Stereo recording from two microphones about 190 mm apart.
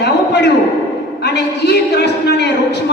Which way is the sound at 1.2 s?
65° left (ahead or behind).